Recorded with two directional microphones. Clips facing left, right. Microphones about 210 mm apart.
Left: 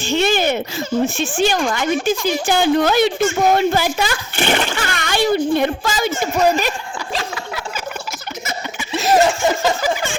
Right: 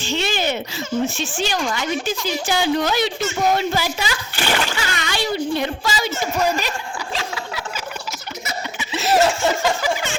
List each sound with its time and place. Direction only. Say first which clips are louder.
0.0 s speech: left 5 dB; 50° left (ahead or behind)
4.4 s a child's voice: left 4 dB; 25° left (ahead or behind)
4.6 s speech: left 2 dB; 55° left (ahead or behind)
7.1 s a sound: left 3 dB; 40° left (ahead or behind)